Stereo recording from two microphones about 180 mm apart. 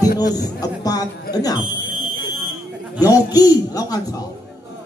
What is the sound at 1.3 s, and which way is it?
Speech, 55° left (ahead or behind).